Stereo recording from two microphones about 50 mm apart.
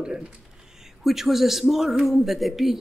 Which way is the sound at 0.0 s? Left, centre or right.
Centre.